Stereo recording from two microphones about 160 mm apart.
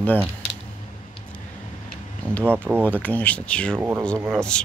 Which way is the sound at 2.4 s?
15° right (ahead or behind).